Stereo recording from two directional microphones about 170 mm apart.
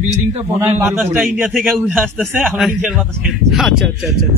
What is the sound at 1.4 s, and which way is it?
Speech, centre (ahead or behind).